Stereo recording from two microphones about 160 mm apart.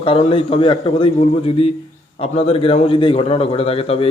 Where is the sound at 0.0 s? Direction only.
35° left (ahead or behind).